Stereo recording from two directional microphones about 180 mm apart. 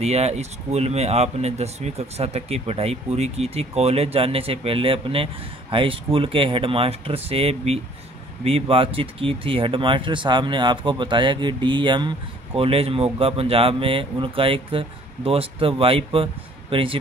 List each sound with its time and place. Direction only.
0.0 s speech: 35° right (ahead or behind)